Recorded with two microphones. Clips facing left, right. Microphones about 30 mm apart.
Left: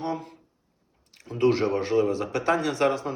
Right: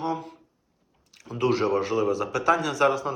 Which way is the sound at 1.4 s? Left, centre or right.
Centre.